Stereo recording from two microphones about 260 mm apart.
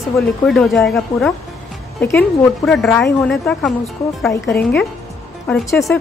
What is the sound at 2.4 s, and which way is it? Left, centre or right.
Speech, centre.